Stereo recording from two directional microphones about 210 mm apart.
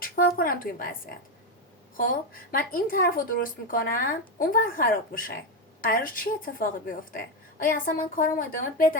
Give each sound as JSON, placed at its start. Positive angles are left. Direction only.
{"t": 0.0, "sound": "speech", "side_deg": 45}
{"t": 2.0, "sound": "a woman's voice", "side_deg": 40}